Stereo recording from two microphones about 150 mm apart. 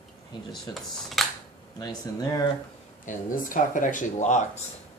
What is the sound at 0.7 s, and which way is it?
Speech, centre (ahead or behind).